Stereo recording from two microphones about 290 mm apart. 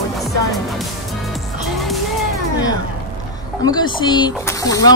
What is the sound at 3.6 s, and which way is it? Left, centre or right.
Speech, centre.